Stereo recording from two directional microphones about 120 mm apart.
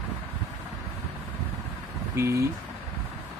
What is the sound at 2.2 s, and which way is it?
Speech, 25° right (ahead or behind).